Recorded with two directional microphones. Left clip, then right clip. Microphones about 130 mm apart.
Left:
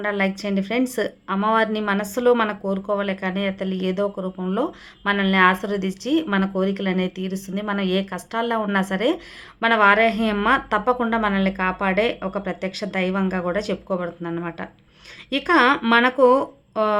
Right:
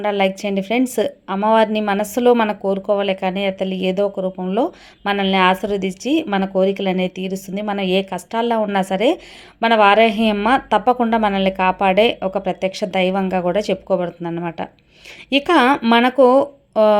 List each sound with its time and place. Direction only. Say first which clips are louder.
0.0 s a woman's voice: right 5 dB; 30° right (ahead or behind)